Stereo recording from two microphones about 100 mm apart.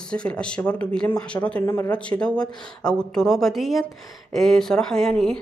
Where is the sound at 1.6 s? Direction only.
25° left (ahead or behind).